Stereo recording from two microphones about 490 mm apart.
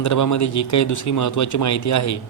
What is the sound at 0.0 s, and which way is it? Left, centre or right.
A man's voice, left.